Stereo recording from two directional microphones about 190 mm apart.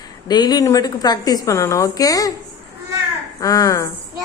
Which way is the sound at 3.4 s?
20° left (ahead or behind).